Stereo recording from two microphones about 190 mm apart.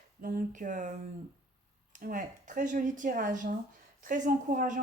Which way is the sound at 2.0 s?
45° right (ahead or behind).